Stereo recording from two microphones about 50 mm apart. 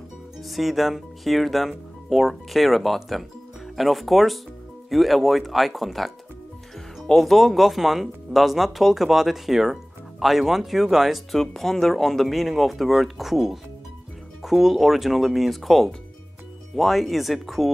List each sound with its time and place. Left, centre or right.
0.4 s speech: centre